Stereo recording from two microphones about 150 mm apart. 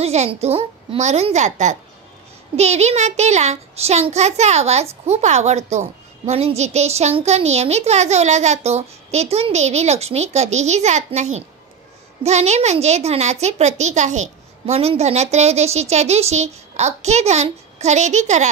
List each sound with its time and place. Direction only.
0.0 s a child's voice: 45° right (ahead or behind)